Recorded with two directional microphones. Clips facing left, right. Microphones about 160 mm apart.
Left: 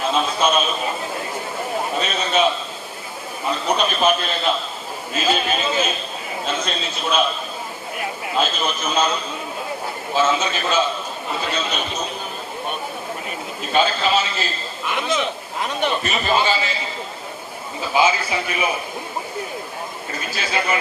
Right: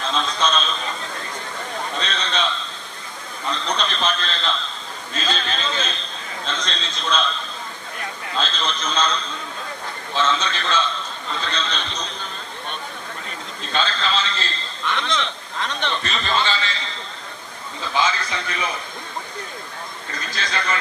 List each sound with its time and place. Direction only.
0.0 s a sound: 10° left (ahead or behind)
3.4 s a man's voice: 10° left (ahead or behind)
13.7 s a man's voice: 10° left (ahead or behind)
20.1 s a man's voice: 10° left (ahead or behind)